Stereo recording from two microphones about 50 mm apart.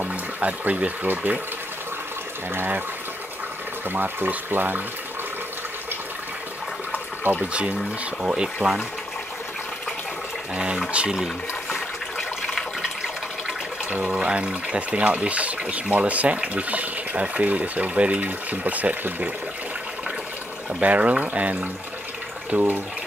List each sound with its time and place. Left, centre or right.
0.0 s speech: right
2.5 s speech: right
3.9 s speech: right
8.2 s speech: centre
10.5 s speech: centre
11.2 s toilet flush: centre
14.2 s speech: right
20.8 s speech: right